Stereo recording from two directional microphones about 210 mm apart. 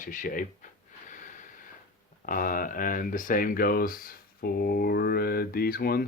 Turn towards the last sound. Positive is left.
turn(degrees=45)  # may be behind; listen again after turning